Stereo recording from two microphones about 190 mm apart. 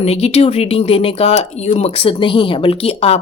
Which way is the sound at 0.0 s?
35° left (ahead or behind).